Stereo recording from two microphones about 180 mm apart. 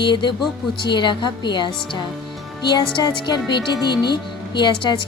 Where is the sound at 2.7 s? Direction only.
25° left (ahead or behind).